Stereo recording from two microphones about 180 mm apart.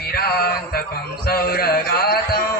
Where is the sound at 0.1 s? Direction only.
60° left (ahead or behind).